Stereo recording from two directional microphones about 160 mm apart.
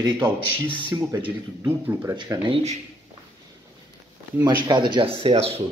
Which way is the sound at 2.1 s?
30° right (ahead or behind).